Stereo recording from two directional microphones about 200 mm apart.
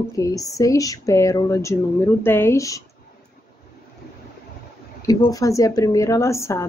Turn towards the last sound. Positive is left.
turn(degrees=15)  # may be behind; listen again after turning